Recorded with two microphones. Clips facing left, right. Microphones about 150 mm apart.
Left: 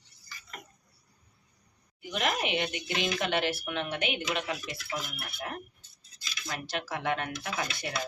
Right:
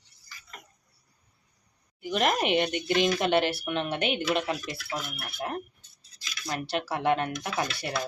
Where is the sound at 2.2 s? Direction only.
45° right (ahead or behind).